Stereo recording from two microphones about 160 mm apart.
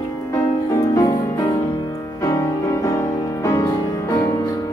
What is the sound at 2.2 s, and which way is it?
Music, 20° left (ahead or behind).